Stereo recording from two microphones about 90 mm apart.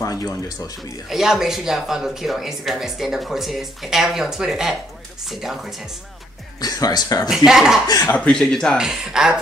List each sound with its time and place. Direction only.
0.0 s speech: 40° left (ahead or behind)
1.0 s speech: 5° right (ahead or behind)
6.6 s speech: 45° left (ahead or behind)
7.2 s speech: 5° right (ahead or behind)
8.1 s speech: 10° left (ahead or behind)
8.7 s speech: 10° right (ahead or behind)